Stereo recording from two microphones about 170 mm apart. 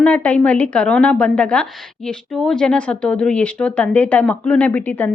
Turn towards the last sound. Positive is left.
turn(degrees=10)  # may be behind; listen again after turning